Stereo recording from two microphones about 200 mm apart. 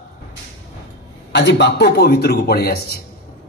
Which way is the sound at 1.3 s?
60° left (ahead or behind).